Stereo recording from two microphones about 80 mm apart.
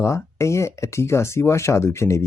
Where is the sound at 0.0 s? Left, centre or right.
Left.